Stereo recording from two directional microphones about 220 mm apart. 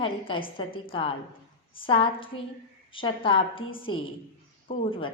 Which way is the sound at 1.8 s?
25° left (ahead or behind).